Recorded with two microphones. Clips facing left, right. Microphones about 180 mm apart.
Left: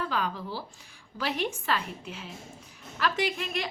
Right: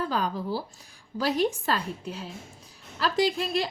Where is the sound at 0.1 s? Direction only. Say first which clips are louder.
Right 4 dB; 40° right (ahead or behind).